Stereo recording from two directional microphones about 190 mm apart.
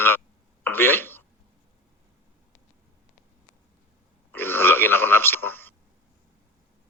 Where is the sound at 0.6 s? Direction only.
10° left (ahead or behind).